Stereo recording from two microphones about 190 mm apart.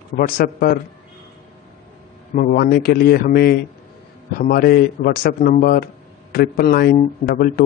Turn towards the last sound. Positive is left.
turn(degrees=50)  # may be behind; listen again after turning